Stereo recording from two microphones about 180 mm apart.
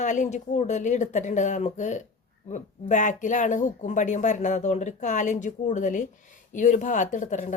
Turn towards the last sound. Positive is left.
turn(degrees=45)  # may be behind; listen again after turning